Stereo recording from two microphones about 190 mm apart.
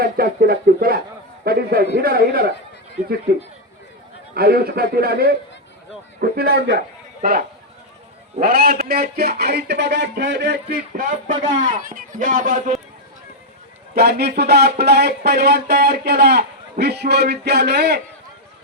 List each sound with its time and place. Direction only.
0.0 s speech: 55° right (ahead or behind)
4.4 s a man's voice: 55° right (ahead or behind)
13.9 s speech: 60° right (ahead or behind)